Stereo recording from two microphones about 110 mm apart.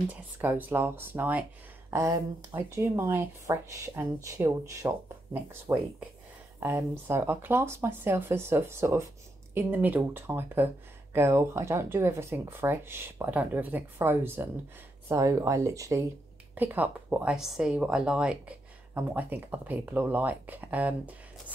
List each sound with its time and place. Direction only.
0.4 s speech: 20° right (ahead or behind)
1.9 s speech: 30° right (ahead or behind)
16.5 s speech: 15° right (ahead or behind)